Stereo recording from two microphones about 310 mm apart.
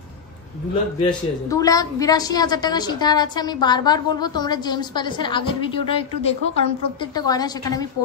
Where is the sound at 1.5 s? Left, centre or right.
Centre.